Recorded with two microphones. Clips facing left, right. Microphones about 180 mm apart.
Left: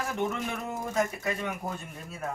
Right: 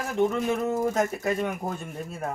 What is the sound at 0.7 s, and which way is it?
Speech, 40° right (ahead or behind).